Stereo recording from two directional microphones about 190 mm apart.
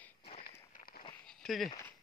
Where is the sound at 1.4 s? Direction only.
Centre (ahead or behind).